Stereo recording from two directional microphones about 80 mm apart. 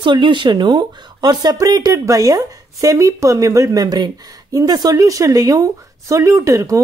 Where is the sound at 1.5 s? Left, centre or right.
Right.